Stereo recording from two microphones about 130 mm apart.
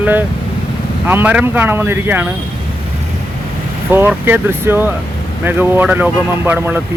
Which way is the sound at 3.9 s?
15° right (ahead or behind).